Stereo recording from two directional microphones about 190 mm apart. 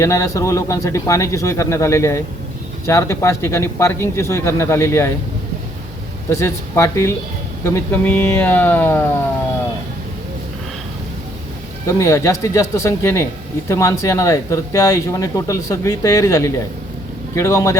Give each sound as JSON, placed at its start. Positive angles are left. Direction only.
{"t": 0.0, "sound": "speech", "side_deg": 15}
{"t": 6.3, "sound": "speech", "side_deg": 15}
{"t": 11.9, "sound": "speech", "side_deg": 15}